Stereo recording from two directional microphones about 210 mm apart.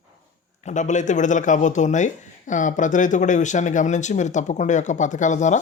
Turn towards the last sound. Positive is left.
turn(degrees=35)  # may be behind; listen again after turning